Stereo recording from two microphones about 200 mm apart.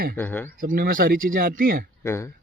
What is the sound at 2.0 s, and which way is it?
Speech, 15° left (ahead or behind).